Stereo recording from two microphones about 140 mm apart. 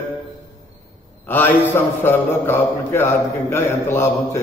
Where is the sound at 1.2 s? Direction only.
15° left (ahead or behind).